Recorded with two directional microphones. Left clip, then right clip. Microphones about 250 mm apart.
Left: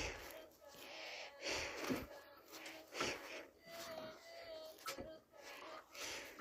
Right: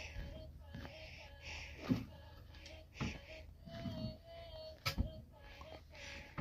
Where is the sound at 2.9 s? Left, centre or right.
Centre.